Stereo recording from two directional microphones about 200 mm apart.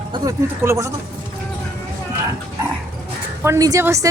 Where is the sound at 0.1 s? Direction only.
20° right (ahead or behind).